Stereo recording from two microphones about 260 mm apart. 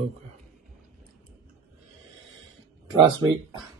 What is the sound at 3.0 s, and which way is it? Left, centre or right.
Speech, centre.